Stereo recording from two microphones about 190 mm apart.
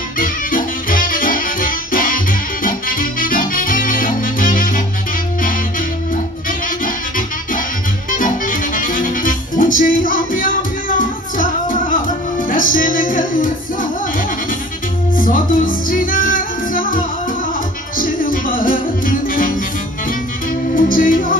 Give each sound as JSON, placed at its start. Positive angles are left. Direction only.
{"t": 0.2, "sound": "music", "side_deg": 45}
{"t": 8.1, "sound": "music", "side_deg": 45}
{"t": 15.1, "sound": "music", "side_deg": 45}
{"t": 20.7, "sound": "music", "side_deg": 45}